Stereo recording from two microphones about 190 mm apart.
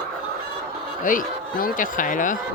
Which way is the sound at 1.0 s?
45° left (ahead or behind).